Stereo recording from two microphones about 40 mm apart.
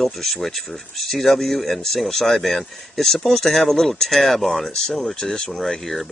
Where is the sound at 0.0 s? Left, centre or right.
Centre.